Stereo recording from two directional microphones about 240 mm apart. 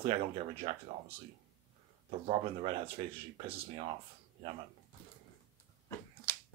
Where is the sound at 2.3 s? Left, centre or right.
Right.